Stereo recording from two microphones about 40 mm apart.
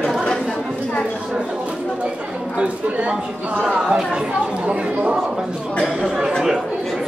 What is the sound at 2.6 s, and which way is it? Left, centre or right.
Speech, right.